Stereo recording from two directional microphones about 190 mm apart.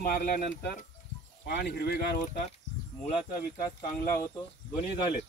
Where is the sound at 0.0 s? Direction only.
50° left (ahead or behind).